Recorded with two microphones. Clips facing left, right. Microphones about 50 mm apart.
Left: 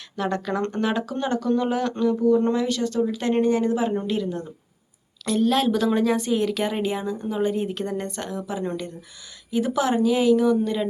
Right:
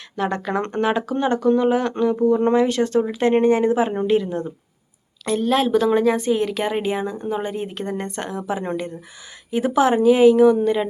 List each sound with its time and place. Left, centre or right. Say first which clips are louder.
0.2 s a woman's voice: right 2 dB; right
9.5 s speech: right 5 dB; right